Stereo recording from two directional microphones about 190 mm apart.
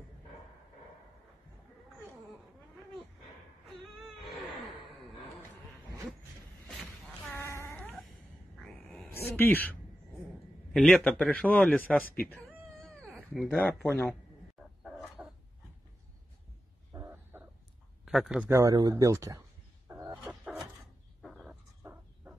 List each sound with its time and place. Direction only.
6.8 s a sound: 10° left (ahead or behind)
10.7 s a man's voice: centre (ahead or behind)
12.8 s cat: 5° left (ahead or behind)
13.8 s a man's voice: 10° left (ahead or behind)
14.8 s dog: centre (ahead or behind)
16.9 s a sound: 10° right (ahead or behind)
18.0 s speech: centre (ahead or behind)
18.5 s speech: 15° right (ahead or behind)
19.9 s wild animals: 15° right (ahead or behind)
20.2 s a sound: centre (ahead or behind)